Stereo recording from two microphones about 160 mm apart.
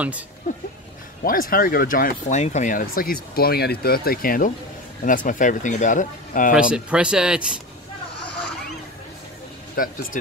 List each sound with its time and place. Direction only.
1.2 s speech: 60° left (ahead or behind)
6.7 s speech: 5° right (ahead or behind)
9.8 s speech: 60° left (ahead or behind)